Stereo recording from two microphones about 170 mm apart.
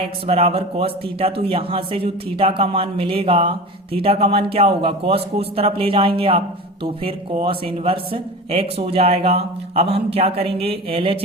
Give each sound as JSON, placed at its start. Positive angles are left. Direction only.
{"t": 0.0, "sound": "speech", "side_deg": -35}